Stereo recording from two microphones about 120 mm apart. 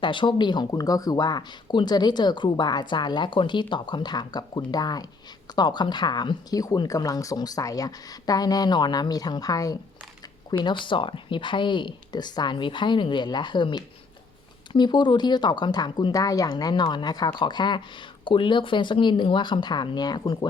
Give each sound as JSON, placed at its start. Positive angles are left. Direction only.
{"t": 0.0, "sound": "speech", "side_deg": 40}
{"t": 10.6, "sound": "speech", "side_deg": 40}